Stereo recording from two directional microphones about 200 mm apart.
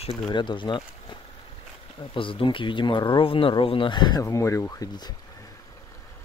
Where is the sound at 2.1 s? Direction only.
25° left (ahead or behind).